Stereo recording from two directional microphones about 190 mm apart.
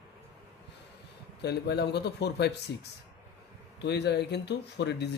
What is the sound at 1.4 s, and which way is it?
Speech, 60° left (ahead or behind).